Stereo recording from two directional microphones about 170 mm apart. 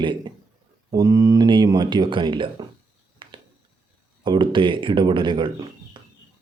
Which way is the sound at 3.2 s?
30° right (ahead or behind).